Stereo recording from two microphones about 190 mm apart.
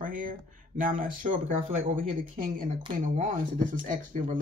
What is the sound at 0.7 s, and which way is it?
Speech, 45° right (ahead or behind).